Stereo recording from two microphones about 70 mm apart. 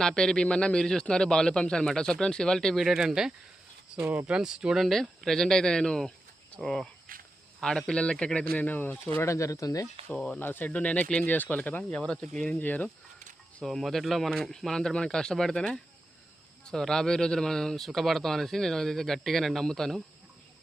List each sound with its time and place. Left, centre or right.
0.0 s a man's voice: centre
2.7 s speech: centre
4.9 s a man's voice: centre; by 9.2 s left
9.2 s speech: left
10.1 s a man's voice: centre
10.4 s speech: left; by 12.5 s centre
12.5 s speech: left
13.6 s speech: centre
16.6 s speech: centre